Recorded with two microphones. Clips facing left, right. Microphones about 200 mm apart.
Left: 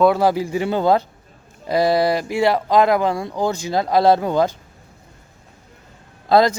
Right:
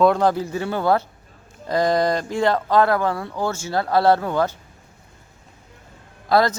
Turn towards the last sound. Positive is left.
turn(degrees=15)  # may be behind; listen again after turning